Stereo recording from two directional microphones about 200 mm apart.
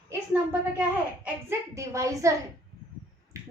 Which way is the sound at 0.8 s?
10° right (ahead or behind).